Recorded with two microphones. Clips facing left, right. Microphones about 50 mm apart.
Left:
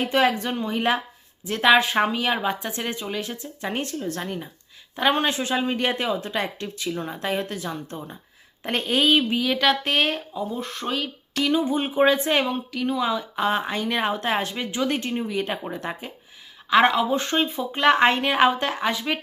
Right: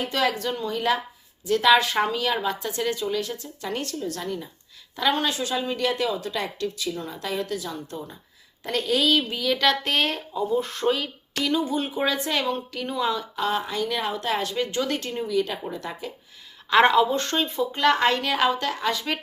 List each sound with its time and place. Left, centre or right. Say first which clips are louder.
0.1 s speech: left 4 dB; left; by 11.4 s centre
11.4 s speech: left 2 dB; left
12.7 s speech: left 5 dB; centre
13.3 s speech: left 2 dB; left
14.6 s speech: left 1 dB; centre
16.6 s a woman's voice: right 1 dB; centre
17.1 s speech: left 2 dB; centre
18.9 s speech: left 2 dB; centre